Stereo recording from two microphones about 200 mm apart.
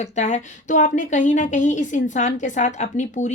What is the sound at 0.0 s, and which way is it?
Speech, 35° left (ahead or behind).